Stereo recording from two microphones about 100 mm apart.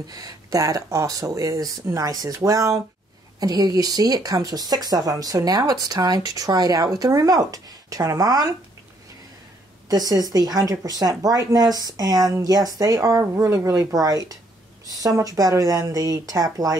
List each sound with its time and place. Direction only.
0.0 s speech: 40° right (ahead or behind)
9.8 s speech: 40° right (ahead or behind)